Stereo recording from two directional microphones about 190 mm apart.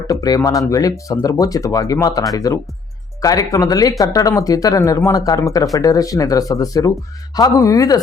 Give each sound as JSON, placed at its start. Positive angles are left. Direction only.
{"t": 0.1, "sound": "speech", "side_deg": 20}